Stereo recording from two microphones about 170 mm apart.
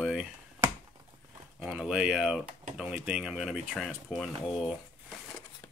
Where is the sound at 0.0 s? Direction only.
Centre (ahead or behind).